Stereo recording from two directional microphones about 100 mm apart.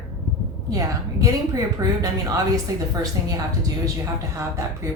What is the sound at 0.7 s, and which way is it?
A woman's voice, 35° right (ahead or behind).